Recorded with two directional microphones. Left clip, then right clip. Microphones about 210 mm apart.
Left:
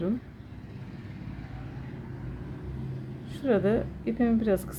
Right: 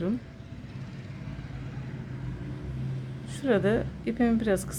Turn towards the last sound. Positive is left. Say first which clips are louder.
# even
turn(degrees=-5)  # may be behind; listen again after turning